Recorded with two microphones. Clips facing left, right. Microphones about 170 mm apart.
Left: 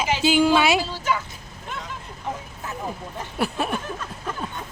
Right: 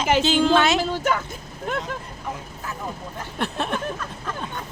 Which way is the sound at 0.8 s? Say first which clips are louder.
Right 3 dB; 55° right (ahead or behind).